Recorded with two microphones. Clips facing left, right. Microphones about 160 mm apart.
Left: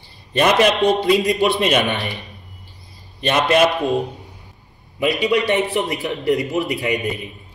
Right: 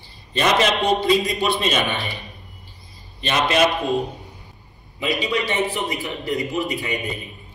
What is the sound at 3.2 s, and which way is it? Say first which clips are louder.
Speech: left 4 dB; 55° left (ahead or behind).